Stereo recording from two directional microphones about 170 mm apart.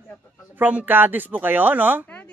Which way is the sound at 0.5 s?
10° right (ahead or behind).